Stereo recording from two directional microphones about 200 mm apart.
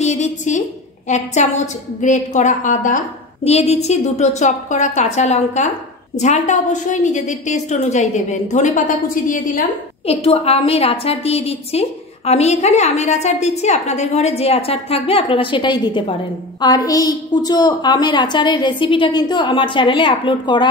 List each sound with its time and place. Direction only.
0.0 s a woman's voice: 35° left (ahead or behind)
10.2 s a woman's voice: 30° left (ahead or behind)